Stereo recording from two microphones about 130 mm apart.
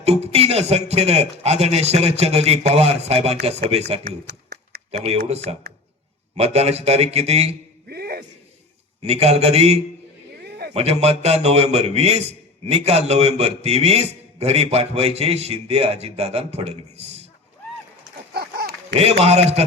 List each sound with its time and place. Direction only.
0.0 s a man's voice: 50° right (ahead or behind)
9.0 s a man's voice: 50° right (ahead or behind)
18.9 s a man's voice: 50° right (ahead or behind)